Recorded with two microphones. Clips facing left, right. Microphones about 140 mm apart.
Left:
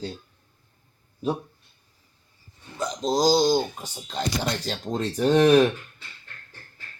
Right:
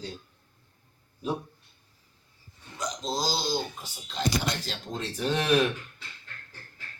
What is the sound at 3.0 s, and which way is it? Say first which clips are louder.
Speech: left 11 dB; 45° left (ahead or behind).